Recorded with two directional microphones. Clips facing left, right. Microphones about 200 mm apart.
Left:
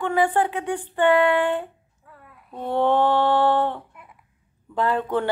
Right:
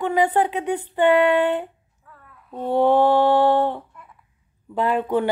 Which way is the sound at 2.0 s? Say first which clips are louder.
Left 1 dB; 15° left (ahead or behind).